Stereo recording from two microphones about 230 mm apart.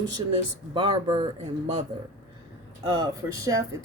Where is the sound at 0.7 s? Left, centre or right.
Right.